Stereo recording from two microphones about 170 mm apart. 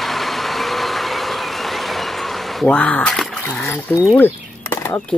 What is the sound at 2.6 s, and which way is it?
Speech, 5° left (ahead or behind).